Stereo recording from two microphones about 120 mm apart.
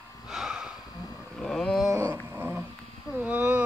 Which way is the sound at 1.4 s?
5° left (ahead or behind).